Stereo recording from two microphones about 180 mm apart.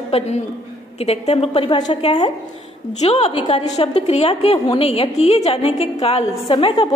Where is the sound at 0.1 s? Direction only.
35° left (ahead or behind).